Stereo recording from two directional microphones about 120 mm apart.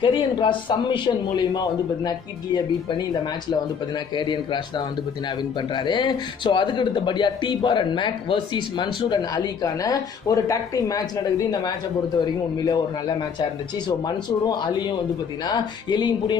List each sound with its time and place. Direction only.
0.0 s speech: 40° left (ahead or behind)